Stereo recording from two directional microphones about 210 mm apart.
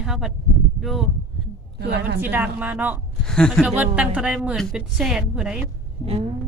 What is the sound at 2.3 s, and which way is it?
Speech, 10° right (ahead or behind).